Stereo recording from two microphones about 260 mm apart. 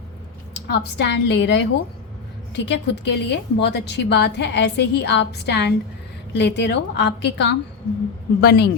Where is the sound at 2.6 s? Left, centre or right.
Left.